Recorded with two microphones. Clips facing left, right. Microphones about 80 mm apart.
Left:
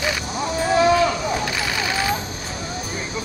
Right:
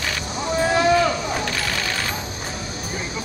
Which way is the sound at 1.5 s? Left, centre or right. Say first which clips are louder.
Left 2 dB; centre.